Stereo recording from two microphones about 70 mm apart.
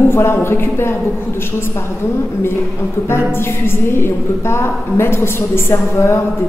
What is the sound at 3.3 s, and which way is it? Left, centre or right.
A woman's voice, left.